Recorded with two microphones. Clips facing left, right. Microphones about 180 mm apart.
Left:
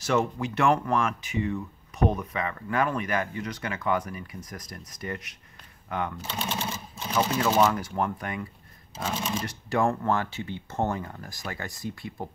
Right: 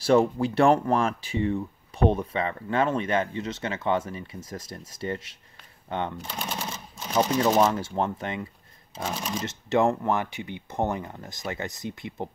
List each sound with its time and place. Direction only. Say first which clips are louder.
0.0 s speech: right 5 dB; 30° right (ahead or behind)
7.2 s speech: right 2 dB; 30° right (ahead or behind)